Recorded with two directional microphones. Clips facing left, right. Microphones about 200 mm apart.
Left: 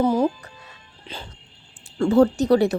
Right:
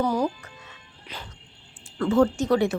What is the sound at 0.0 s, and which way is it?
Music, 25° left (ahead or behind).